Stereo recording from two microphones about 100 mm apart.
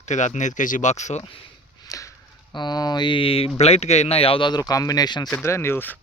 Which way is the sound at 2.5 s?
45° left (ahead or behind).